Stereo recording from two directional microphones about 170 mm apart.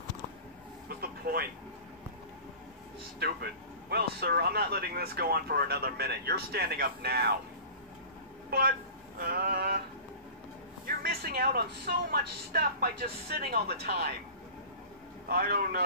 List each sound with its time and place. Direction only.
0.8 s a sound: 60° right (ahead or behind)
3.2 s speech: 70° right (ahead or behind)
8.5 s speech: 65° right (ahead or behind)
11.0 s speech: 65° right (ahead or behind)
15.2 s speech: 65° right (ahead or behind)